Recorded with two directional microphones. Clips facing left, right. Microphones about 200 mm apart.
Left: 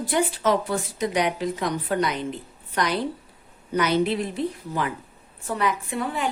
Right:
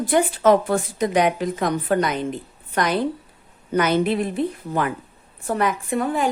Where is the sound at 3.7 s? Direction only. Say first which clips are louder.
Right 3 dB; 50° right (ahead or behind).